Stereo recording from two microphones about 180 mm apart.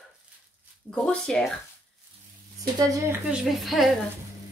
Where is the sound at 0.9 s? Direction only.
5° left (ahead or behind).